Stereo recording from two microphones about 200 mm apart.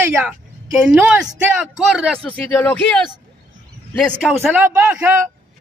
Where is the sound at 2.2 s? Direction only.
5° left (ahead or behind).